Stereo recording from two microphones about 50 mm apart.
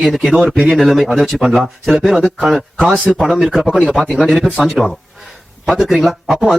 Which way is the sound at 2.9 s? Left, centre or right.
Centre.